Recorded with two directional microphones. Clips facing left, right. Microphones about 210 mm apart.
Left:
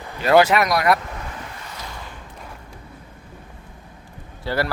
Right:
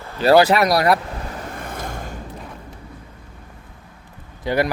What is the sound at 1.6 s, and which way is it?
Waves, 50° right (ahead or behind).